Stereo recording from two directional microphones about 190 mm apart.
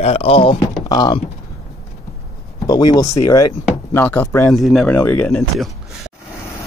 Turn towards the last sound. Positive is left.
turn(degrees=5)  # may be behind; listen again after turning